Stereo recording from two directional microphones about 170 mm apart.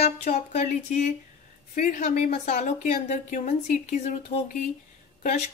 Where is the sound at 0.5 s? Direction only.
45° left (ahead or behind).